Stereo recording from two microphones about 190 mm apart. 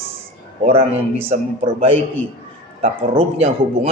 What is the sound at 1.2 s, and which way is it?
A man's voice, 30° right (ahead or behind).